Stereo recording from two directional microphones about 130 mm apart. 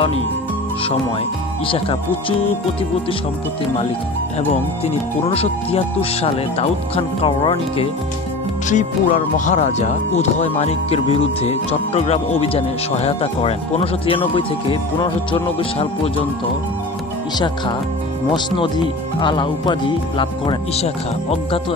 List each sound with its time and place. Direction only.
1.7 s speech: 45° left (ahead or behind)
4.4 s speech: 55° left (ahead or behind)
8.6 s speech: 70° left (ahead or behind); by 16.3 s 45° left (ahead or behind)
18.3 s speech: 35° left (ahead or behind)